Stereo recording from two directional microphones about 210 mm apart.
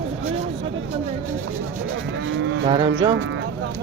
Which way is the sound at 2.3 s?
65° right (ahead or behind).